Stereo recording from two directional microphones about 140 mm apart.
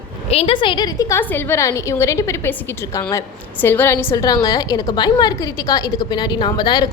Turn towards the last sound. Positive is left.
turn(degrees=30)  # may be behind; listen again after turning